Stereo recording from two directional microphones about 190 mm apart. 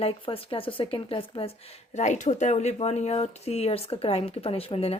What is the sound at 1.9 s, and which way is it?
Speech, 40° left (ahead or behind).